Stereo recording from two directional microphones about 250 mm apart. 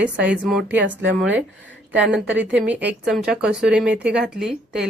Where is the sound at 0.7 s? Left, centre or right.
Right.